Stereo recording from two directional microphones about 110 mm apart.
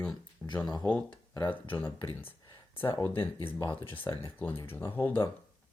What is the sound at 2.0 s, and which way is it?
Speech, 55° left (ahead or behind).